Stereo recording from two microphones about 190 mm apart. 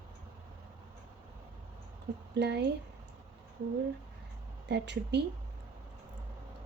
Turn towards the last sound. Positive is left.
turn(degrees=-65)  # may be behind; listen again after turning